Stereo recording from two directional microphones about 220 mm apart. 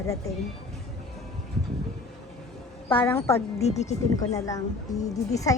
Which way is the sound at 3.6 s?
30° left (ahead or behind).